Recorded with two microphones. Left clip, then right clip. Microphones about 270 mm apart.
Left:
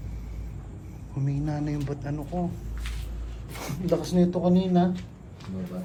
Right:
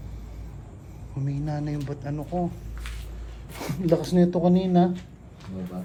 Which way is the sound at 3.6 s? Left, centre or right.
Right.